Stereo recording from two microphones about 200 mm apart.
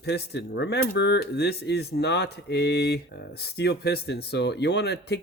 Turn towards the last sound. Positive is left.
turn(degrees=55)  # may be behind; listen again after turning